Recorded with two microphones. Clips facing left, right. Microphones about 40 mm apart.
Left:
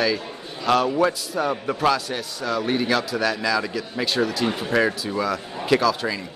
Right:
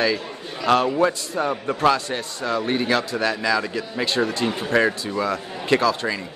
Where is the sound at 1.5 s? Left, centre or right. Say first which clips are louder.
Right 2 dB; centre.